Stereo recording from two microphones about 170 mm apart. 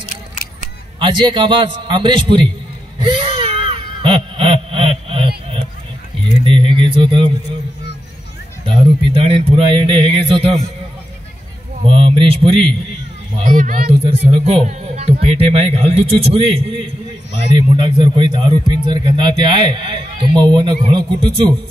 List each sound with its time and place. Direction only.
0.9 s a man's voice: 30° right (ahead or behind)
3.0 s a sound: 30° right (ahead or behind)
6.4 s a sound: 30° right (ahead or behind)
8.6 s speech: 30° right (ahead or behind)
11.8 s speech: 30° right (ahead or behind)
13.4 s speech: 50° right (ahead or behind)
13.8 s a man's voice: 35° right (ahead or behind)